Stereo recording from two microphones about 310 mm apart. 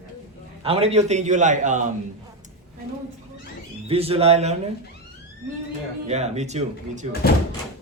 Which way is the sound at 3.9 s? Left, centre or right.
Centre.